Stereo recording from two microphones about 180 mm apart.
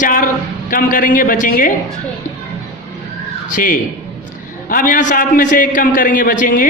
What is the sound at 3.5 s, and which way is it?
A woman's voice, 45° left (ahead or behind).